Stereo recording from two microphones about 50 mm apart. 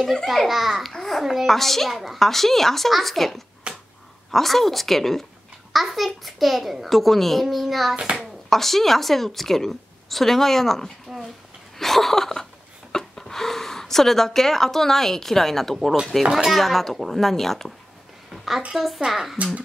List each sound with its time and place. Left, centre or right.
0.0 s a child's voice: centre
0.5 s a child's voice: centre
3.7 s a sound: right
4.3 s a child's voice: centre
7.9 s a child's voice: right
8.2 s speech: centre
11.8 s a sound: centre
12.9 s a woman's voice: centre
18.3 s a sound: centre
18.7 s a child's voice: centre
19.3 s a child's voice: right